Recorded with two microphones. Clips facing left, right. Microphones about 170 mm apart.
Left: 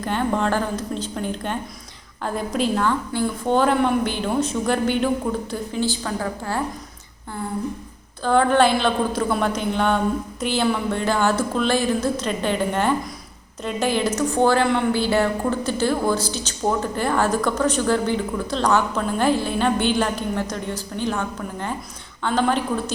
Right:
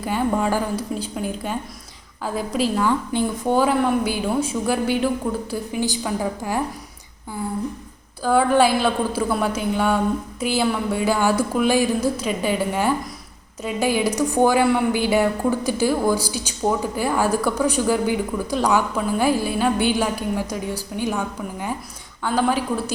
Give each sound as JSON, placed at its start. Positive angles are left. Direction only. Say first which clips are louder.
{"t": 0.0, "sound": "a woman's voice", "louder": "right 1 dB", "side_deg": -5}
{"t": 3.1, "sound": "speech", "louder": "right 1 dB", "side_deg": -20}
{"t": 3.5, "sound": "a woman's voice", "louder": "even", "side_deg": -5}
{"t": 8.2, "sound": "a woman's voice", "louder": "even", "side_deg": -5}